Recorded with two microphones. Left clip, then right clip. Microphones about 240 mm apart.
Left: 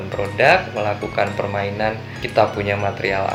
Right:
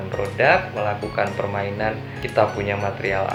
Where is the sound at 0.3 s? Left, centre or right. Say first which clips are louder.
Left 3 dB; left.